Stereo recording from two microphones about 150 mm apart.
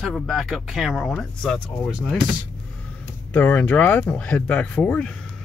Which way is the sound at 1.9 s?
5° right (ahead or behind).